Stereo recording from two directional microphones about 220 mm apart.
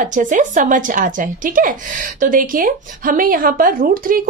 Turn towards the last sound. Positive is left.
turn(degrees=-40)  # may be behind; listen again after turning